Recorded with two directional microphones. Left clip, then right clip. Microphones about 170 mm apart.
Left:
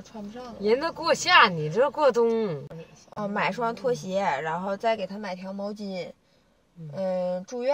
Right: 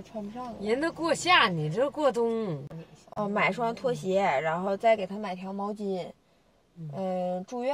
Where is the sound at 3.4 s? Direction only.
10° right (ahead or behind).